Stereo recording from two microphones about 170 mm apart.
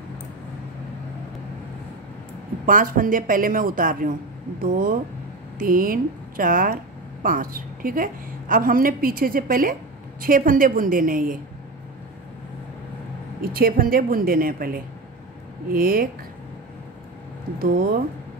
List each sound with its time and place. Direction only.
2.6 s a woman's voice: 55° right (ahead or behind)
13.4 s a woman's voice: 60° right (ahead or behind)
17.6 s a woman's voice: 60° right (ahead or behind)